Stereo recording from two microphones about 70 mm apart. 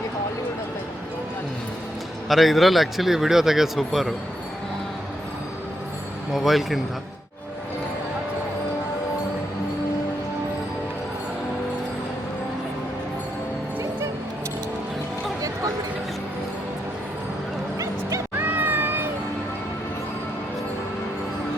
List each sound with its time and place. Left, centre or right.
2.3 s speech: centre
6.3 s speech: centre
18.3 s music: right